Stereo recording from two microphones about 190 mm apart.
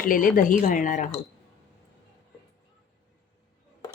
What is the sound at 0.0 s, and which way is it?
A woman's voice, 45° left (ahead or behind).